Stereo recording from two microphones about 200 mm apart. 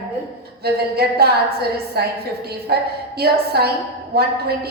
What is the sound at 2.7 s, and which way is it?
A woman's voice, 50° right (ahead or behind).